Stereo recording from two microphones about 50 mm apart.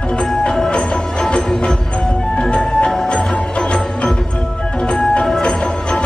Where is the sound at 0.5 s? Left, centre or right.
Centre.